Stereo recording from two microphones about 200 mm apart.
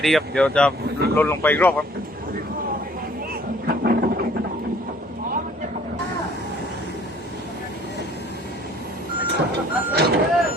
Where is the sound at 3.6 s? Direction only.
45° right (ahead or behind).